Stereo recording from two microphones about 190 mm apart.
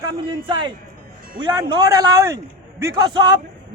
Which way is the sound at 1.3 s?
25° right (ahead or behind).